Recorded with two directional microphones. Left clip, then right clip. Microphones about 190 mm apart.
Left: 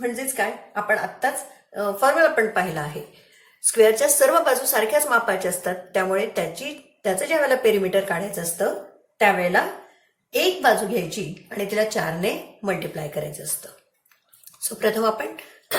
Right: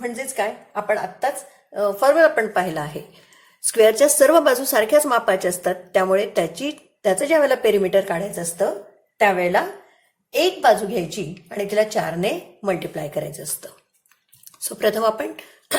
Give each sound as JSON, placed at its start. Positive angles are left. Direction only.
{"t": 0.0, "sound": "a woman's voice", "side_deg": -50}
{"t": 14.8, "sound": "a woman's voice", "side_deg": -50}